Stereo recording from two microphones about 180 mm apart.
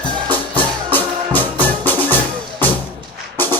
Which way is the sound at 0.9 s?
10° left (ahead or behind).